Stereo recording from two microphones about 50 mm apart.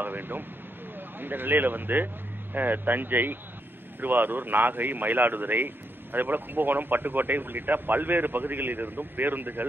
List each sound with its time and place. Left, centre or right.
0.0 s vehicle: right
0.9 s speech: right